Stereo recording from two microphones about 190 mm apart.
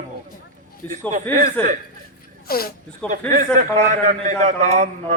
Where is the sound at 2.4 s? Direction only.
50° left (ahead or behind).